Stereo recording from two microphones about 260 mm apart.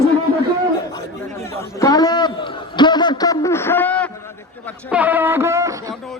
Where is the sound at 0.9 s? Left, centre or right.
Centre.